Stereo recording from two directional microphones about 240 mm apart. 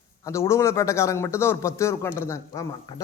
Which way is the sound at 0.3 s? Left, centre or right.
Centre.